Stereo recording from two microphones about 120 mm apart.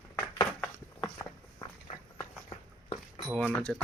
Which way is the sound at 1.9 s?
75° left (ahead or behind).